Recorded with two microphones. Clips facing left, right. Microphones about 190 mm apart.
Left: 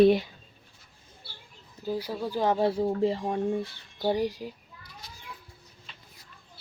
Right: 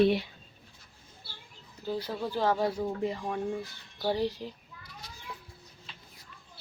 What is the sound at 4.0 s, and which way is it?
Speech, 15° left (ahead or behind).